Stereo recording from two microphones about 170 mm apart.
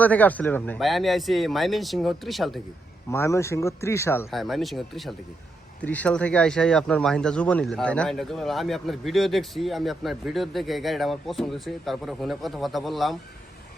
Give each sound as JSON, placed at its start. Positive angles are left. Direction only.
{"t": 0.0, "sound": "speech", "side_deg": 10}
{"t": 3.1, "sound": "speech", "side_deg": 15}
{"t": 4.3, "sound": "speech", "side_deg": 0}